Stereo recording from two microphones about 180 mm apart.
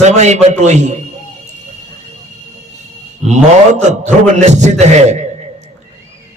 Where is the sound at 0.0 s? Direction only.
40° right (ahead or behind).